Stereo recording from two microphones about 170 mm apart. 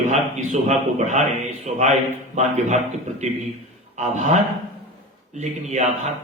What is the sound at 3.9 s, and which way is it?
Speech, 45° right (ahead or behind).